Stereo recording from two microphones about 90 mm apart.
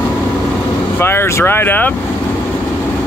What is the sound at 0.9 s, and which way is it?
Speech, 25° left (ahead or behind).